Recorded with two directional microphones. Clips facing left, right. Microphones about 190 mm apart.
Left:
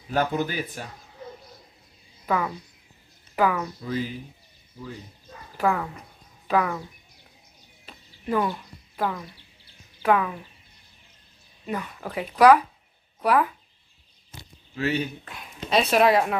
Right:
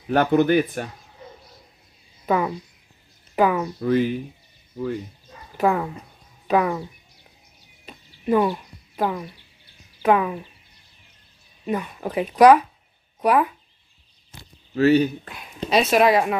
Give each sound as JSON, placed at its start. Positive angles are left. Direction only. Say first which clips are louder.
{"t": 0.1, "sound": "speech", "louder": "right 8 dB", "side_deg": -65}
{"t": 2.2, "sound": "speech", "louder": "right 4 dB", "side_deg": -25}
{"t": 3.8, "sound": "speech", "louder": "right 12 dB", "side_deg": -65}
{"t": 5.6, "sound": "speech", "louder": "right 4 dB", "side_deg": -25}
{"t": 7.8, "sound": "a sound", "louder": "right 7 dB", "side_deg": -20}
{"t": 10.0, "sound": "speech", "louder": "right 3 dB", "side_deg": -20}
{"t": 11.6, "sound": "speech", "louder": "right 5 dB", "side_deg": -20}
{"t": 14.8, "sound": "speech", "louder": "right 10 dB", "side_deg": -35}
{"t": 15.7, "sound": "speech", "louder": "right 2 dB", "side_deg": 0}